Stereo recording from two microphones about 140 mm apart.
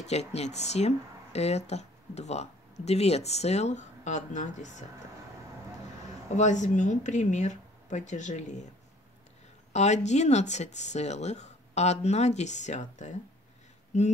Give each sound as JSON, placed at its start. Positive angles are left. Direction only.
{"t": 0.0, "sound": "speech", "side_deg": 50}
{"t": 6.3, "sound": "speech", "side_deg": 60}
{"t": 9.7, "sound": "speech", "side_deg": 55}